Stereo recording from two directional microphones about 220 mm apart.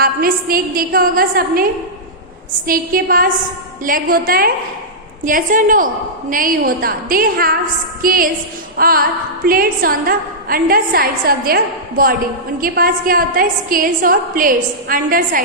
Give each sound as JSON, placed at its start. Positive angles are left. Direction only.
{"t": 0.0, "sound": "a woman's voice", "side_deg": -40}
{"t": 2.6, "sound": "a woman's voice", "side_deg": -40}